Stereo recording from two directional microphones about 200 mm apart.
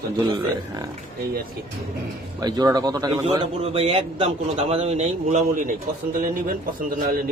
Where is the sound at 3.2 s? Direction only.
30° right (ahead or behind).